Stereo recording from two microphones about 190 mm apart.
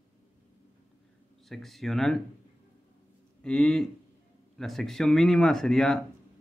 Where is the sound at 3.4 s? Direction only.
5° left (ahead or behind).